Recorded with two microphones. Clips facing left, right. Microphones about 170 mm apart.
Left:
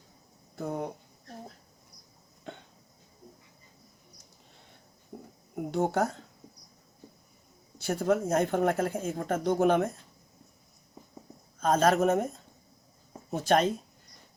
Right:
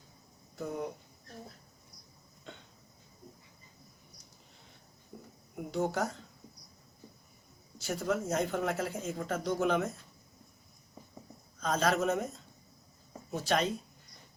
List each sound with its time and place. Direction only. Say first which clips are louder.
0.5 s speech: left 3 dB; 55° left (ahead or behind)
5.5 s speech: left 5 dB; 55° left (ahead or behind)
7.8 s speech: left 6 dB; 60° left (ahead or behind)
11.6 s speech: left 6 dB; 50° left (ahead or behind)
13.3 s speech: left 6 dB; 50° left (ahead or behind)